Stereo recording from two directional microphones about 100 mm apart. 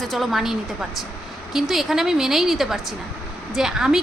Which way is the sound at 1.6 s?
Centre (ahead or behind).